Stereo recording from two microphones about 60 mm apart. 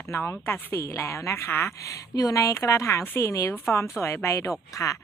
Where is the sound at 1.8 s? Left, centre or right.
Left.